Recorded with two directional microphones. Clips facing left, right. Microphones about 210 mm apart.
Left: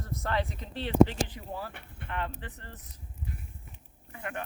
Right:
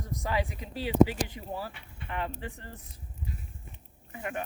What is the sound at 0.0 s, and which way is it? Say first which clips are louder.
Speech: even; 15° right (ahead or behind).